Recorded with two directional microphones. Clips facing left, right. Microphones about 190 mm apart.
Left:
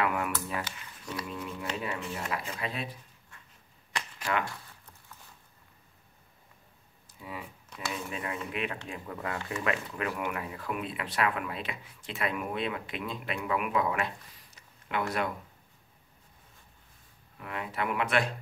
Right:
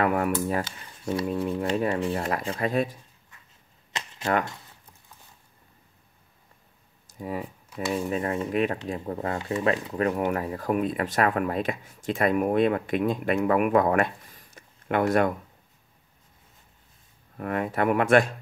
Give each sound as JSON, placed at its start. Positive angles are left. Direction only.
{"t": 0.0, "sound": "speech", "side_deg": -45}
{"t": 2.0, "sound": "speech", "side_deg": -35}
{"t": 2.2, "sound": "speech", "side_deg": -45}
{"t": 3.9, "sound": "cap gun", "side_deg": -20}
{"t": 7.1, "sound": "speech", "side_deg": -45}
{"t": 17.4, "sound": "speech", "side_deg": -50}